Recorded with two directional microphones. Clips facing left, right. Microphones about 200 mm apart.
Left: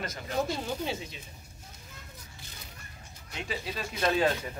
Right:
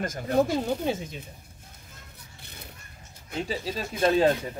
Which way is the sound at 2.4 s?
60° right (ahead or behind).